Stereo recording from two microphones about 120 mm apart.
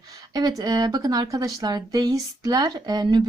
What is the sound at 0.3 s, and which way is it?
A woman's voice, 35° right (ahead or behind).